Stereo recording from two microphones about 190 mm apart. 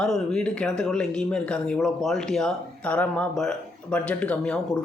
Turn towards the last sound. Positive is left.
turn(degrees=5)  # may be behind; listen again after turning